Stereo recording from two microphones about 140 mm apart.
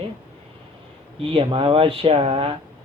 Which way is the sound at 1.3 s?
40° right (ahead or behind).